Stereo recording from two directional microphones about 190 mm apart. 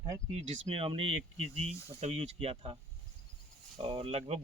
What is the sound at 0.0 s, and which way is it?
Speech, 30° right (ahead or behind).